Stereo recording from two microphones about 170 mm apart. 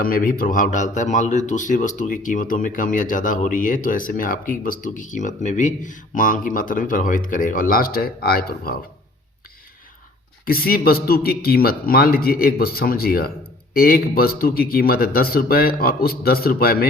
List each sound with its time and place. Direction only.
0.0 s speech: 55° left (ahead or behind)
10.4 s speech: 60° left (ahead or behind)